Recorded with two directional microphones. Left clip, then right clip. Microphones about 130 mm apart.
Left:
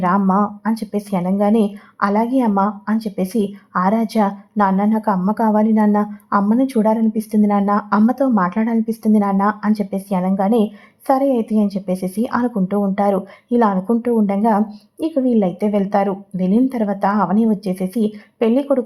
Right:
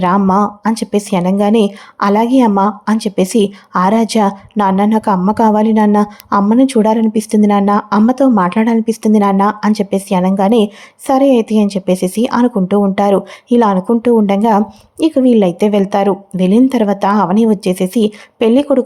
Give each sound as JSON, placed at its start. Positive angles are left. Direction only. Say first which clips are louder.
{"t": 0.0, "sound": "speech", "louder": "right 5 dB", "side_deg": -35}